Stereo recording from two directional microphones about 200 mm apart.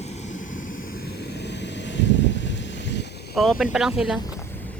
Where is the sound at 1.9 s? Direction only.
65° left (ahead or behind).